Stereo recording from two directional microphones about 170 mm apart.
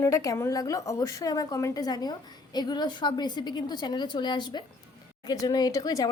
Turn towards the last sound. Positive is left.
turn(degrees=20)  # may be behind; listen again after turning